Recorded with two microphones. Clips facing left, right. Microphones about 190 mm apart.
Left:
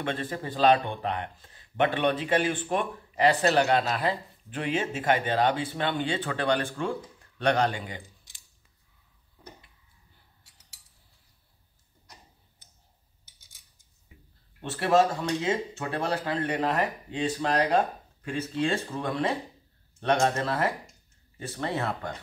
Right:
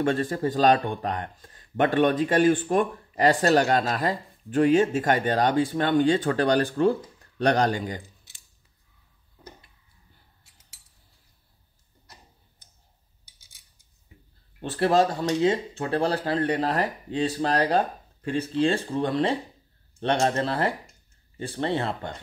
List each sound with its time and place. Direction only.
0.0 s speech: 45° right (ahead or behind)
14.6 s speech: 30° right (ahead or behind)